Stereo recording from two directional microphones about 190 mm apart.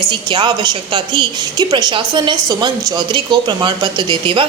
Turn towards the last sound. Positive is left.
turn(degrees=-25)  # may be behind; listen again after turning